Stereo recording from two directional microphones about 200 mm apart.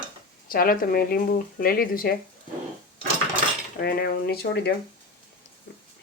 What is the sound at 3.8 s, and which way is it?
Speech, 55° left (ahead or behind).